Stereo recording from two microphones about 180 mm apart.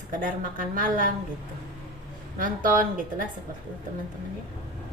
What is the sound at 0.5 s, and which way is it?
Speech, 50° right (ahead or behind).